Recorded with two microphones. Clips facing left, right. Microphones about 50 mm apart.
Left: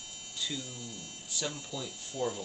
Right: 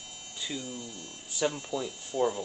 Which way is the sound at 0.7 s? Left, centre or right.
Centre.